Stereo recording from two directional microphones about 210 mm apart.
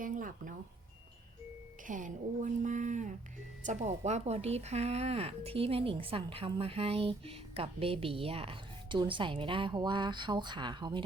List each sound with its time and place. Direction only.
0.0 s speech: 40° right (ahead or behind)
1.9 s a woman's voice: 40° right (ahead or behind); by 11.0 s 20° right (ahead or behind)